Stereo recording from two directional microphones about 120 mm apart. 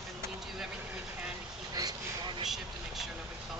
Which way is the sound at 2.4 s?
Centre (ahead or behind).